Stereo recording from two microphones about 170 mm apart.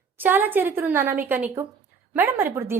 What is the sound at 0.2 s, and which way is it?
A woman's voice, 10° right (ahead or behind).